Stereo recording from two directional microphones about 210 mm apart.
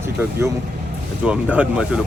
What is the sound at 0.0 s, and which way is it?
Speech, 10° right (ahead or behind).